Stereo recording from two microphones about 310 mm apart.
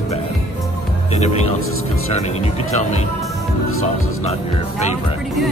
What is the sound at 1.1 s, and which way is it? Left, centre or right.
Speech, left.